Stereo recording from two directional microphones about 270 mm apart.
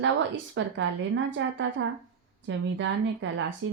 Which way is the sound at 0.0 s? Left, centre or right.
Right.